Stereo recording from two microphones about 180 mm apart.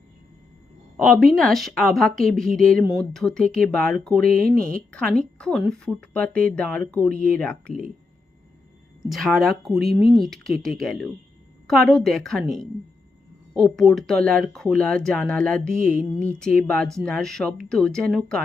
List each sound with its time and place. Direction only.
1.4 s a woman's voice: centre (ahead or behind)
4.4 s speech: 50° right (ahead or behind)
4.9 s a woman's voice: 5° left (ahead or behind)
9.0 s a woman's voice: centre (ahead or behind)
15.8 s speech: 50° right (ahead or behind)
16.6 s a woman's voice: 5° left (ahead or behind)